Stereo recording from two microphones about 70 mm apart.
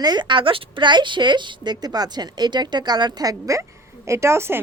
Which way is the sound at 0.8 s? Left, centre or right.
Right.